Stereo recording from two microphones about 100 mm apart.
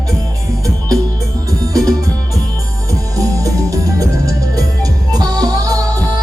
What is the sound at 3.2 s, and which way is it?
Music, 35° right (ahead or behind).